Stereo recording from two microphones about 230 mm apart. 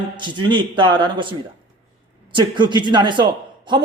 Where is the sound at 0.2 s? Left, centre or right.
Centre.